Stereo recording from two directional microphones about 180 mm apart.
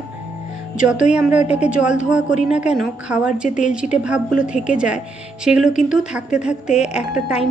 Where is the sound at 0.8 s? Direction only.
5° right (ahead or behind).